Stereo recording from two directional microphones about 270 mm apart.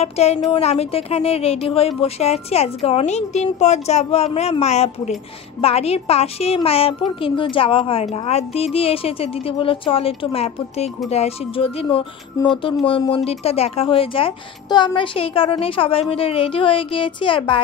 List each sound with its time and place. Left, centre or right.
0.0 s speech: left